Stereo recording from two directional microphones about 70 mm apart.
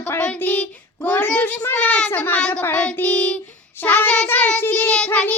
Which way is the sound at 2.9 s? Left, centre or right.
Left.